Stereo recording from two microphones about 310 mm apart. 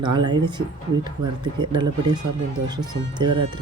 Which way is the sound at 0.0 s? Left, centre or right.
Centre.